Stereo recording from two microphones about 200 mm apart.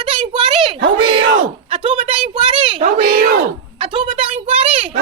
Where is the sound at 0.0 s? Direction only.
25° right (ahead or behind).